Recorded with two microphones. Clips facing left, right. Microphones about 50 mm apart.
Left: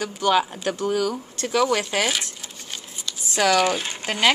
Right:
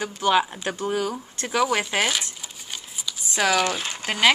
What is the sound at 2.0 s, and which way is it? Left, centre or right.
Speech, centre.